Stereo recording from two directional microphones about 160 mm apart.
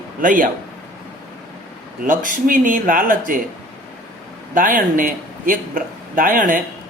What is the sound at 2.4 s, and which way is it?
Speech, 60° right (ahead or behind).